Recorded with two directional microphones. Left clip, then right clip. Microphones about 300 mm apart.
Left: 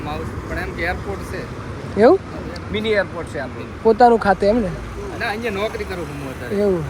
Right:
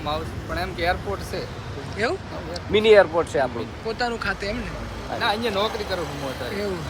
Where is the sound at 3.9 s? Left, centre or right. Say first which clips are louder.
Left 14 dB; centre.